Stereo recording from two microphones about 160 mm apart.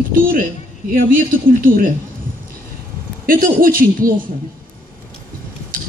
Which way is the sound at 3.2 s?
60° right (ahead or behind).